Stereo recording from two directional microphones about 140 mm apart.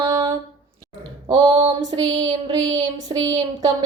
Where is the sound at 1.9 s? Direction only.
35° right (ahead or behind).